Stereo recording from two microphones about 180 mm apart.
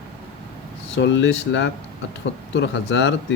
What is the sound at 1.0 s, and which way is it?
Speech, 80° left.